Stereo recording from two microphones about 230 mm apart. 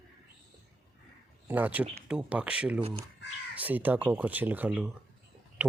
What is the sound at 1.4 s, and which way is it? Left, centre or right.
Speech, centre.